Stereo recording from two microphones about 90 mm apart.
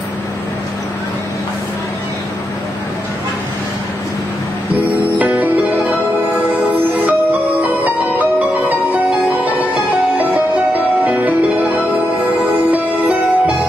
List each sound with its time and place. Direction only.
5.3 s music: 20° right (ahead or behind)
10.1 s music: 15° right (ahead or behind)